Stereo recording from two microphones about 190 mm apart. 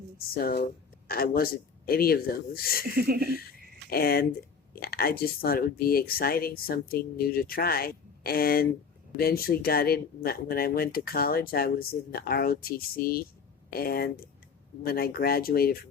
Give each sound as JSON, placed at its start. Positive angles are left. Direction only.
{"t": 0.3, "sound": "speech", "side_deg": 50}
{"t": 2.9, "sound": "speech", "side_deg": -55}
{"t": 3.8, "sound": "speech", "side_deg": 50}